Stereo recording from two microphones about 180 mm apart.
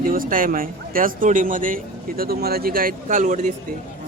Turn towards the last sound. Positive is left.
turn(degrees=-45)  # may be behind; listen again after turning